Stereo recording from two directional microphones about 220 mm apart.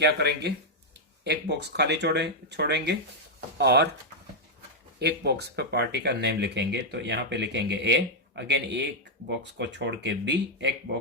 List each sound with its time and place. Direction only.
0.0 s speech: 50° right (ahead or behind)
4.9 s speech: 50° right (ahead or behind)